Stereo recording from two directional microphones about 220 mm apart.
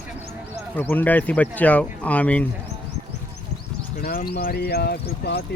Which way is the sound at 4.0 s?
45° left (ahead or behind).